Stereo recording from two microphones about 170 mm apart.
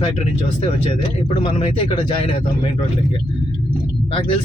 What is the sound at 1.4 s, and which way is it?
Speech, 30° left (ahead or behind).